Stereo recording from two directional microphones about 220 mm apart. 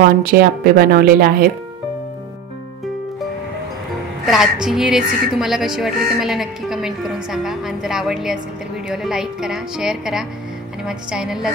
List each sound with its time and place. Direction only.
0.0 s a woman's voice: 40° right (ahead or behind)
4.3 s speech: centre (ahead or behind)